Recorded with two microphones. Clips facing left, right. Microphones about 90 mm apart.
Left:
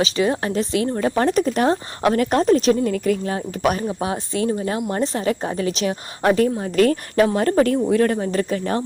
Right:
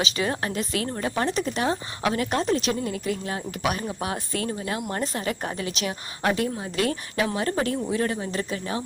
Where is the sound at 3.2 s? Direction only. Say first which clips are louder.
Left 6 dB; 35° left (ahead or behind).